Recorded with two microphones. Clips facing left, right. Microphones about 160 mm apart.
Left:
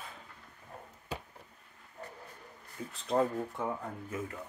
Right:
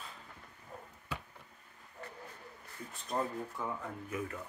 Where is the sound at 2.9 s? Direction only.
75° left (ahead or behind).